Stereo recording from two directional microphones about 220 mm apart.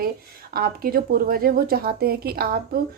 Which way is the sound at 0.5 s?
45° right (ahead or behind).